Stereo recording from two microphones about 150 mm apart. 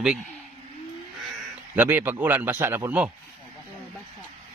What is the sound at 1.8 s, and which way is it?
A man's voice, 15° right (ahead or behind).